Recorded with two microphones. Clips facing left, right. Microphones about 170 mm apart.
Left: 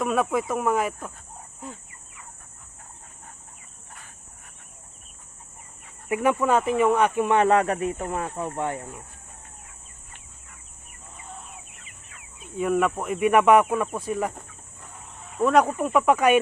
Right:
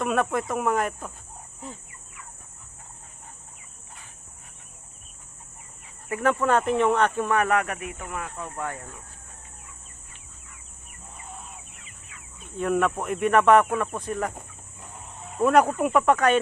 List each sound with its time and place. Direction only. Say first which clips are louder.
0.0 s speech: left 1 dB; centre (ahead or behind)
6.1 s speech: left 2 dB; 15° left (ahead or behind)
6.4 s speech: right 1 dB; 5° left (ahead or behind)
7.3 s speech: left 4 dB; 25° left (ahead or behind)
12.5 s speech: left 1 dB; 5° left (ahead or behind)
15.4 s speech: even; 5° right (ahead or behind)